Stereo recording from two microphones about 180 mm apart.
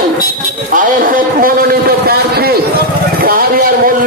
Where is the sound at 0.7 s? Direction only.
50° right (ahead or behind).